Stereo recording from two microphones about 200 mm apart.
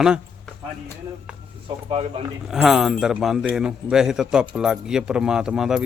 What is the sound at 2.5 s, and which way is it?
A man's voice, centre (ahead or behind).